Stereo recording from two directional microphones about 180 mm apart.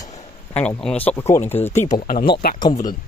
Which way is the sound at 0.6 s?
5° left (ahead or behind).